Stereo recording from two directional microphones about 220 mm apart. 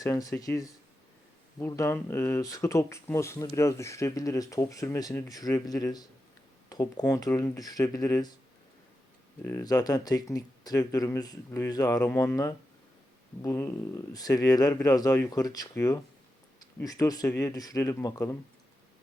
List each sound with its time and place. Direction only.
0.0 s speech: 15° left (ahead or behind)
9.4 s speech: 10° left (ahead or behind)